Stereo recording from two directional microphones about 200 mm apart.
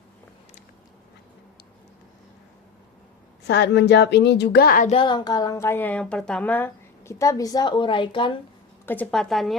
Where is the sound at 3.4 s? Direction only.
60° left (ahead or behind).